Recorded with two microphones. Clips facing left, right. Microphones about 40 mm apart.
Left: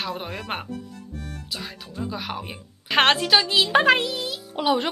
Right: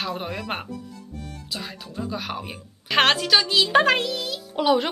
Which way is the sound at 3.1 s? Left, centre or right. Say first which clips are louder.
Even; centre.